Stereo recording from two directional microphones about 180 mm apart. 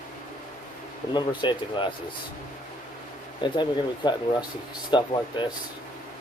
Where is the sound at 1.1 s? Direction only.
25° left (ahead or behind).